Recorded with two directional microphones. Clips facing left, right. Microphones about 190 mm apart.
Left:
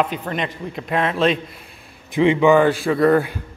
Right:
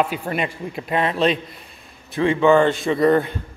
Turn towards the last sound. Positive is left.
turn(degrees=5)  # may be behind; listen again after turning